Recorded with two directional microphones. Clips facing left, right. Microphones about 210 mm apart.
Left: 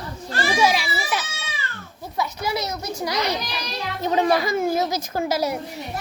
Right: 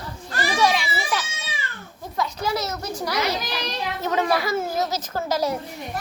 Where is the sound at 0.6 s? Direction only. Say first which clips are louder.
Even; 5° left (ahead or behind).